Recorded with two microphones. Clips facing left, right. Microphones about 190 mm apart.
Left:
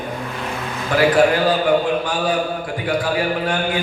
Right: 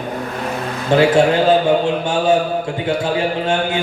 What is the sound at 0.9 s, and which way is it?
A man's voice, 25° right (ahead or behind).